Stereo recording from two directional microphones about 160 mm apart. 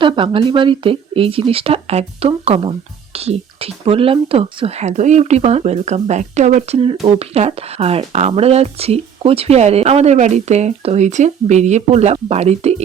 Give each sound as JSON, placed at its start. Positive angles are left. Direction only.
{"t": 0.0, "sound": "speech", "side_deg": -30}